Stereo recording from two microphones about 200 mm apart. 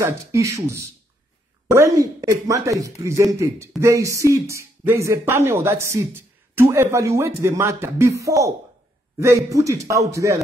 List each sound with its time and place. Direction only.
0.0 s speech: 15° right (ahead or behind)
2.2 s speech: 15° right (ahead or behind)